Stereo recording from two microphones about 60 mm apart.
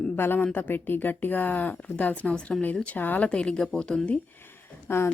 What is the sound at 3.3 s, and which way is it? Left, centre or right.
Speech, centre.